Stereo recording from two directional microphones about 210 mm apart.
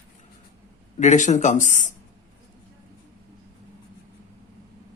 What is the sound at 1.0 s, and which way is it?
Speech, 35° left (ahead or behind).